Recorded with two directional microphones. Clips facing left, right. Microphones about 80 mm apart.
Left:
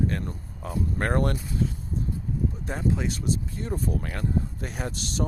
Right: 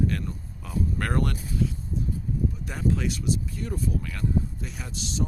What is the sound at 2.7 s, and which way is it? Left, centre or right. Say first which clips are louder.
Speech: even; left.